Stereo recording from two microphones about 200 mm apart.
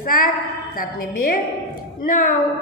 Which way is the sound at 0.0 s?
45° left (ahead or behind).